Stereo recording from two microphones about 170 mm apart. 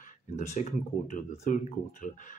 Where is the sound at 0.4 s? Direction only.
45° left (ahead or behind).